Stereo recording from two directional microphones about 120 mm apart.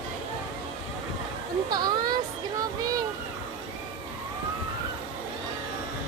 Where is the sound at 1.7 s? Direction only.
35° right (ahead or behind).